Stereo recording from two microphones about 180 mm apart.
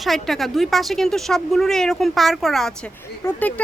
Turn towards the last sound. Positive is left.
turn(degrees=10)  # may be behind; listen again after turning